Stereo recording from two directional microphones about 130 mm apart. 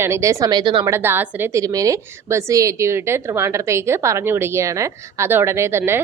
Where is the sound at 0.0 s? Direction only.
20° right (ahead or behind); by 0.9 s 40° right (ahead or behind).